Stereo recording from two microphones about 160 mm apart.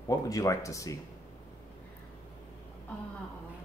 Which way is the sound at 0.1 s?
20° left (ahead or behind).